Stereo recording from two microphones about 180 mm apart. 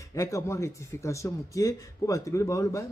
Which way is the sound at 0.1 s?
15° left (ahead or behind).